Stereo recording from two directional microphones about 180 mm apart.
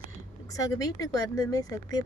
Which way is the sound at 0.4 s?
20° left (ahead or behind).